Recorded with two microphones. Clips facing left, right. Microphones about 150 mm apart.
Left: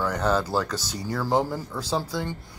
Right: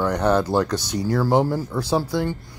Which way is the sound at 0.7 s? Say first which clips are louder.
Right 7 dB; 10° left (ahead or behind).